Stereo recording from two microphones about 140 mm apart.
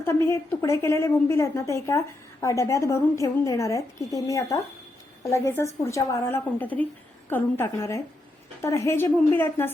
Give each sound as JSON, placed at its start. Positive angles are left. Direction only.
{"t": 0.0, "sound": "a woman's voice", "side_deg": 20}